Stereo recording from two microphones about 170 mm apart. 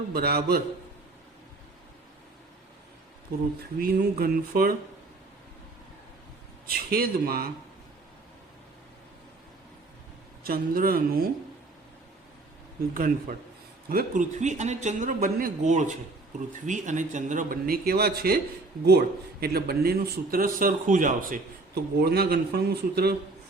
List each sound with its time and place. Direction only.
0.1 s a man's voice: 65° right (ahead or behind)
3.6 s a man's voice: 60° right (ahead or behind)
6.7 s a man's voice: 60° right (ahead or behind)
10.4 s a man's voice: 60° right (ahead or behind)
12.9 s a man's voice: 60° right (ahead or behind)
22.0 s a man's voice: 70° right (ahead or behind)